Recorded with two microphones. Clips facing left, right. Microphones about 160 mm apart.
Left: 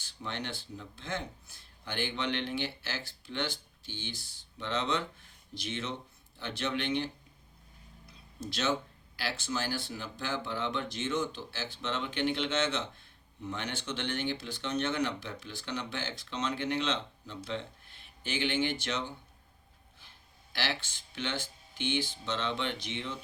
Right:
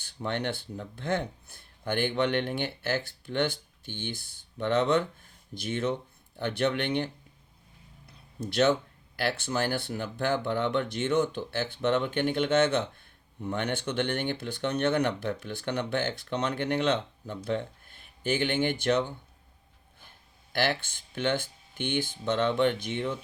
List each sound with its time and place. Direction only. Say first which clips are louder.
0.0 s speech: right 8 dB; 55° right (ahead or behind)
8.0 s a sound: right 4 dB; 60° right (ahead or behind)
9.1 s speech: right 6 dB; 55° right (ahead or behind)